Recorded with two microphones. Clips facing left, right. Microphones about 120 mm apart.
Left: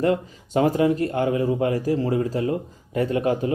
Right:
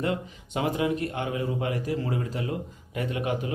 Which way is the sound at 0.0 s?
40° left (ahead or behind).